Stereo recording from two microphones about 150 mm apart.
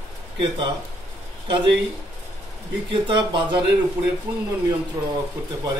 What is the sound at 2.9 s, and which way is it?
Speech, 30° right (ahead or behind).